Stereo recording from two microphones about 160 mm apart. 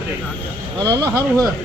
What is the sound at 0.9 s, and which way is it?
Speech, 20° right (ahead or behind).